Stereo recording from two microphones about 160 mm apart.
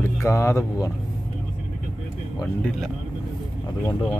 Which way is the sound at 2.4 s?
5° left (ahead or behind).